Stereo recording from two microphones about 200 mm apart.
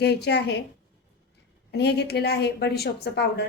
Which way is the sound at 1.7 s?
55° left (ahead or behind).